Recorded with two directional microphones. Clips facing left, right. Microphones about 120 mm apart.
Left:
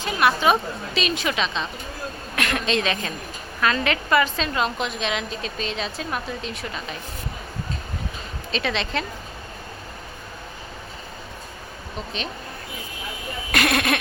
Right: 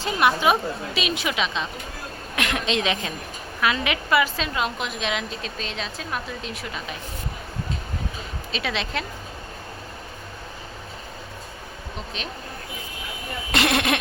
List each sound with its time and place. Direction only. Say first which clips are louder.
0.0 s a woman's voice: even; 20° right (ahead or behind); by 6.8 s 5° right (ahead or behind)
8.5 s a woman's voice: left 3 dB; 5° right (ahead or behind)
13.5 s a sound: even; 20° right (ahead or behind)